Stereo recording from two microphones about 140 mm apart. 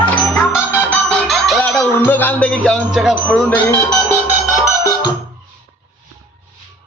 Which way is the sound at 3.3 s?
10° left (ahead or behind).